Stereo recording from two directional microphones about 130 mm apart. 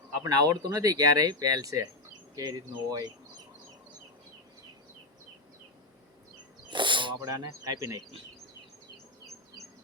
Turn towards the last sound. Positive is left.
turn(degrees=-25)  # may be behind; listen again after turning